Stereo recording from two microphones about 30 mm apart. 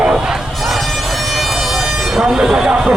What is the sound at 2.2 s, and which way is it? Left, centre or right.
Speech, centre.